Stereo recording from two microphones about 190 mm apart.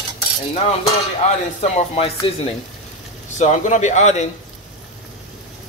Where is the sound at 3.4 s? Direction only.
40° left (ahead or behind).